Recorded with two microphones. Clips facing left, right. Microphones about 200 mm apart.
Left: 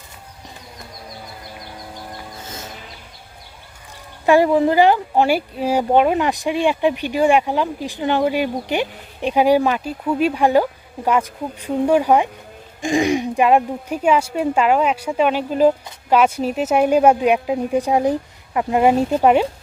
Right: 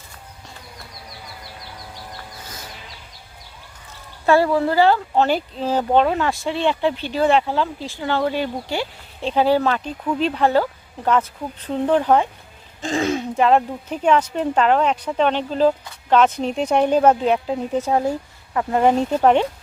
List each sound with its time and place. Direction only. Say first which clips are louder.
2.4 s music: left 4 dB; 25° left (ahead or behind)
4.3 s speech: left 3 dB; 15° left (ahead or behind)